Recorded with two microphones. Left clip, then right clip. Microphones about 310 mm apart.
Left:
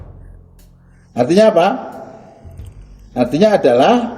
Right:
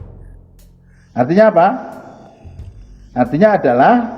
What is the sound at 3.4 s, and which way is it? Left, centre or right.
Speech, right.